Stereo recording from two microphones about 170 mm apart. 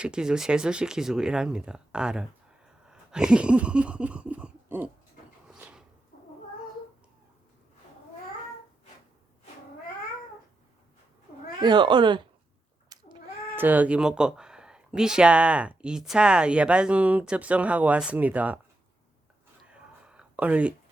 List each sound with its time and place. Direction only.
0.0 s speech: 5° right (ahead or behind)
2.8 s a sound: 5° right (ahead or behind)
6.1 s cat: 50° left (ahead or behind)
11.6 s speech: 25° right (ahead or behind)
12.9 s cat: 25° right (ahead or behind)
13.6 s speech: 10° right (ahead or behind)
19.6 s a sound: 5° right (ahead or behind)